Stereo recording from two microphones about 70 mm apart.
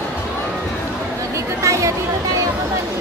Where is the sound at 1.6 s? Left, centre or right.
Right.